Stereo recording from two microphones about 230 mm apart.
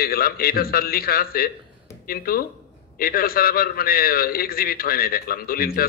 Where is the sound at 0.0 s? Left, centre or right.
Left.